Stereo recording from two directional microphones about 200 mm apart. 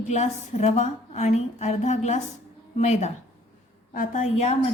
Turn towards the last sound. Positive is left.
turn(degrees=35)  # may be behind; listen again after turning